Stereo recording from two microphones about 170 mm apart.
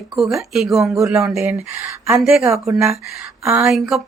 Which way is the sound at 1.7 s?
15° right (ahead or behind).